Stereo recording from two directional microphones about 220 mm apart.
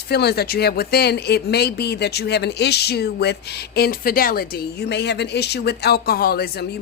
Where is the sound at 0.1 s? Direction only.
45° left (ahead or behind).